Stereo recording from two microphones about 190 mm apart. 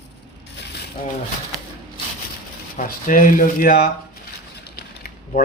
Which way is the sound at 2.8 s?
45° left (ahead or behind).